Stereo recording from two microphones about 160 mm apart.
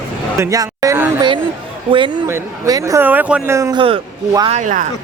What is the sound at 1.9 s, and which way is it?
Speech, 35° right (ahead or behind).